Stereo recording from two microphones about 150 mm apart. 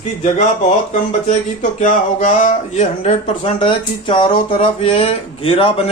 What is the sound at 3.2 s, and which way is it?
Speech, 35° left (ahead or behind).